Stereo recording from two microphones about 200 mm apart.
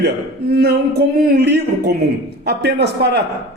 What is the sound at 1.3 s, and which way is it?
A man's voice, 55° right (ahead or behind).